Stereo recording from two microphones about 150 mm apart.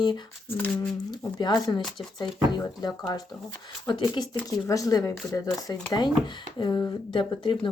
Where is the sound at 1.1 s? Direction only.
30° left (ahead or behind).